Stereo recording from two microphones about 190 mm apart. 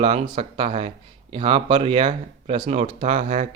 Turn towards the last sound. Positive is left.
turn(degrees=-40)  # may be behind; listen again after turning